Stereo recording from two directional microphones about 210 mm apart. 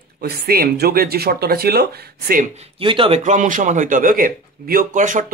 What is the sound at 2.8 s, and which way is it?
A man's voice, 25° right (ahead or behind).